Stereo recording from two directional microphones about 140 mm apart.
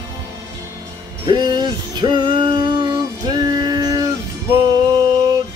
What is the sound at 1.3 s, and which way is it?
Music, 30° right (ahead or behind).